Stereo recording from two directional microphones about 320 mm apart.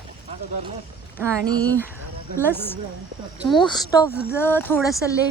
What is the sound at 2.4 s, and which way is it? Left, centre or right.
A woman's voice, centre.